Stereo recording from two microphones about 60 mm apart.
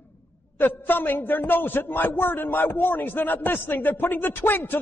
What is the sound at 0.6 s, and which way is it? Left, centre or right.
A man's voice, left.